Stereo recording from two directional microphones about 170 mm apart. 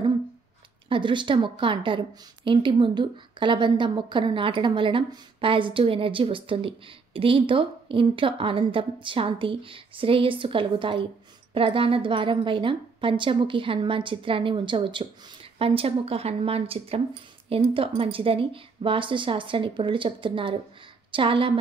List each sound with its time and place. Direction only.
0.8 s a woman's voice: 30° right (ahead or behind)